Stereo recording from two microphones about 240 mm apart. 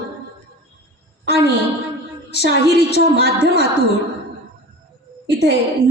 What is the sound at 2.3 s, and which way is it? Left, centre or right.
A woman's voice, left.